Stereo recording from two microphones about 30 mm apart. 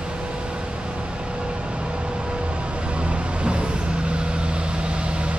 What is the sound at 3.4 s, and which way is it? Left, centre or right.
Vehicle, right.